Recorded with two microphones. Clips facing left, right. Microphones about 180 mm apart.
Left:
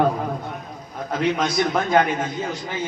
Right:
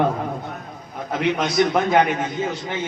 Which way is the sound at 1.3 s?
20° right (ahead or behind).